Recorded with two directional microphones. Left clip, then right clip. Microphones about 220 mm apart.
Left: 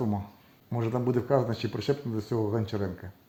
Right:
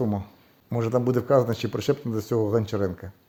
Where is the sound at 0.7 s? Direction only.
55° right (ahead or behind).